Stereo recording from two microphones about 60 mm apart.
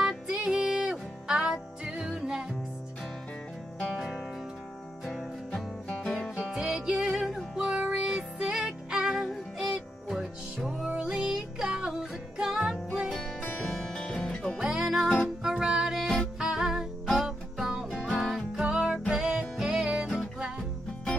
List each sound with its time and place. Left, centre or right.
0.3 s music: centre
3.9 s music: centre
5.0 s music: centre
6.3 s music: centre
13.4 s music: left
13.7 s music: centre
14.6 s music: centre
18.6 s music: centre